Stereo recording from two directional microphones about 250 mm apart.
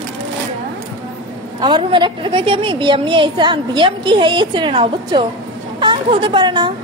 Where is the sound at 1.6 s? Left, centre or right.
Centre.